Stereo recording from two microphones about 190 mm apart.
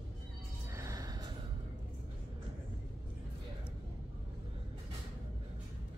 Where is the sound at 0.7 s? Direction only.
15° right (ahead or behind).